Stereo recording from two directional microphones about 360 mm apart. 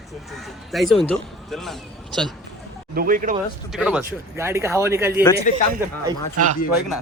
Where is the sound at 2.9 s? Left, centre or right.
Right.